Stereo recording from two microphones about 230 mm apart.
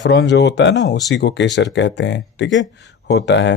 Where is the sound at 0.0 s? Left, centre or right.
Left.